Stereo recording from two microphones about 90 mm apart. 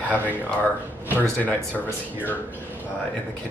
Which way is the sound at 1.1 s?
20° left (ahead or behind).